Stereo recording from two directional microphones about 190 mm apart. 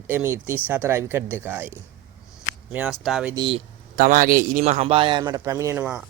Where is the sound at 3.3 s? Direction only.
25° right (ahead or behind).